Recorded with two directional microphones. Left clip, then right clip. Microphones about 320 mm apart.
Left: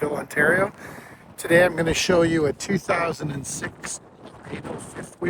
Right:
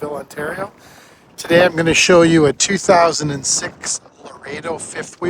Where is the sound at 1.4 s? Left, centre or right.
Right.